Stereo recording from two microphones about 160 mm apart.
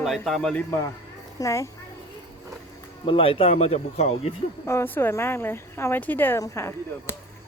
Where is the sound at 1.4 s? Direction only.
20° left (ahead or behind).